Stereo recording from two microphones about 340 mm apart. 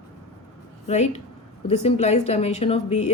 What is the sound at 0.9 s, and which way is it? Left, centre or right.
Speech, centre.